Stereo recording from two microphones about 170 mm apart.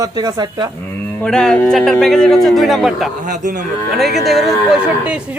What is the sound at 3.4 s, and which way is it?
Speech, 50° right (ahead or behind).